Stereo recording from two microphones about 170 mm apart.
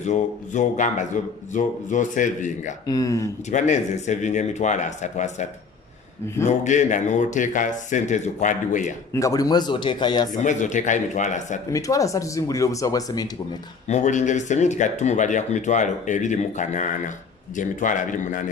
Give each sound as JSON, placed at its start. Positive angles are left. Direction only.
{"t": 0.0, "sound": "speech", "side_deg": 45}
{"t": 2.8, "sound": "speech", "side_deg": 20}
{"t": 3.5, "sound": "speech", "side_deg": 45}
{"t": 9.1, "sound": "speech", "side_deg": 20}
{"t": 10.3, "sound": "speech", "side_deg": 45}
{"t": 11.7, "sound": "speech", "side_deg": 20}
{"t": 13.8, "sound": "speech", "side_deg": 45}